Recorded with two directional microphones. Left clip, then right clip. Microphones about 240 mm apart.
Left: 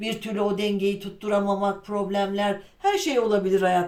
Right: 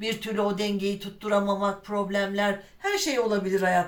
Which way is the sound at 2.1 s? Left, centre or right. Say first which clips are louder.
Left 2 dB; centre.